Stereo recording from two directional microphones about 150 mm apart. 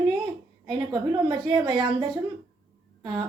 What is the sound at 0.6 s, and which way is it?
Speech, 25° right (ahead or behind).